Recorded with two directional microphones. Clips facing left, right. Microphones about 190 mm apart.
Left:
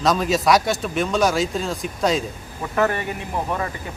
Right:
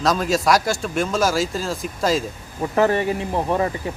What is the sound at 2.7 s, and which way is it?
Speech, 30° right (ahead or behind).